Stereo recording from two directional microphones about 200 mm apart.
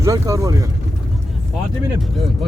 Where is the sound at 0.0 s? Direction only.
15° right (ahead or behind).